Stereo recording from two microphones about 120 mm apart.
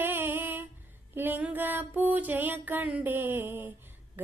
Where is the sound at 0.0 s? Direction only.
15° right (ahead or behind).